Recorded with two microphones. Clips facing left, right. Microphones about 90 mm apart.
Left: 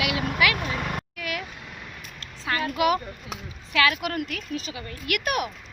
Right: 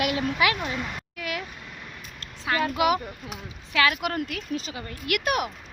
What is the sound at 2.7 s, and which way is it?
Speech, 20° right (ahead or behind).